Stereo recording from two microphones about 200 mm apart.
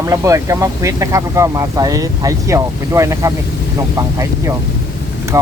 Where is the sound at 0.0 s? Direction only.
15° right (ahead or behind).